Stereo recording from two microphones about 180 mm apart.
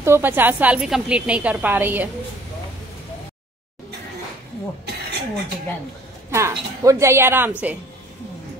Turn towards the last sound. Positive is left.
turn(degrees=-10)  # may be behind; listen again after turning